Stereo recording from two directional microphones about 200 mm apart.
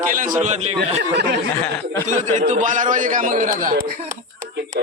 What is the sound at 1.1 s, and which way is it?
Speech, 60° right (ahead or behind).